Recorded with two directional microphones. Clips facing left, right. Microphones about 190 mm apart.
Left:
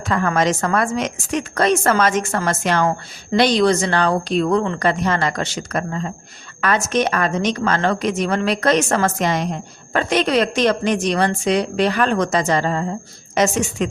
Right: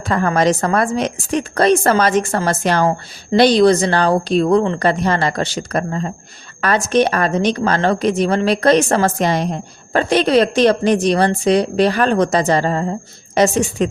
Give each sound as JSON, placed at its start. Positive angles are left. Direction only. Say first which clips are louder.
{"t": 0.1, "sound": "a woman's voice", "louder": "right 3 dB", "side_deg": -35}